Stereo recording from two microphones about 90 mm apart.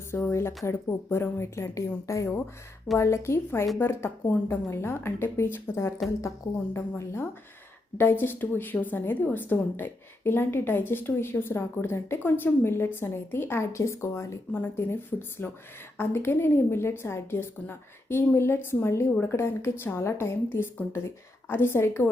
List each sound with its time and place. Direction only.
0.1 s a woman's voice: 30° left (ahead or behind)